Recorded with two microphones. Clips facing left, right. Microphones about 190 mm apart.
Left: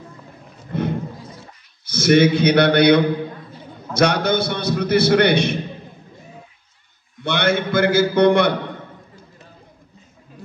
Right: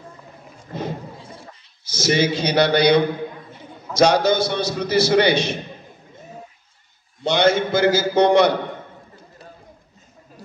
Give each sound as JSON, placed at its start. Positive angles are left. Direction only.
{"t": 1.9, "sound": "a man's voice", "side_deg": 60}
{"t": 7.2, "sound": "a man's voice", "side_deg": 55}